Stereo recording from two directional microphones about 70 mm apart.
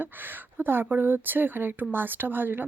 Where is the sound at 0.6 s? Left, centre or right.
Right.